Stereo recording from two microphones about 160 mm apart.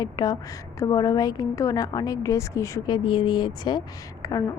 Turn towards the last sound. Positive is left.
turn(degrees=25)  # may be behind; listen again after turning